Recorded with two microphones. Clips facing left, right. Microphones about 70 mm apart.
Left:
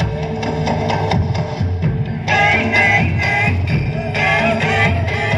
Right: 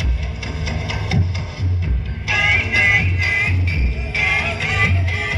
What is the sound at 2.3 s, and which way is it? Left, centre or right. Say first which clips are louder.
Music: left 5 dB; left.